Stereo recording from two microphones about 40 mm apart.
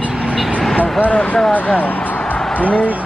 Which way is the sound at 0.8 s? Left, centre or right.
Left.